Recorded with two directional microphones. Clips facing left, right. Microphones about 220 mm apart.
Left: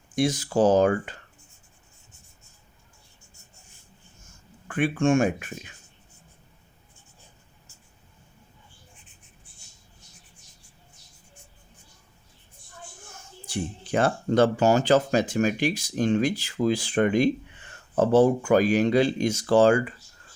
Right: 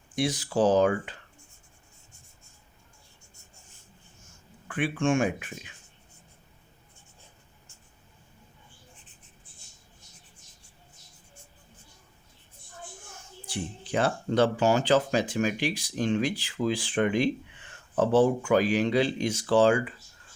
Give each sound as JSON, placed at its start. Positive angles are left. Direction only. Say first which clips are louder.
{"t": 0.2, "sound": "speech", "louder": "left 3 dB", "side_deg": 45}
{"t": 4.7, "sound": "speech", "louder": "left 4 dB", "side_deg": 45}
{"t": 13.5, "sound": "speech", "louder": "left 4 dB", "side_deg": 45}